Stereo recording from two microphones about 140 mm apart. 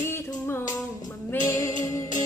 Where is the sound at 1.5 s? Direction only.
20° left (ahead or behind).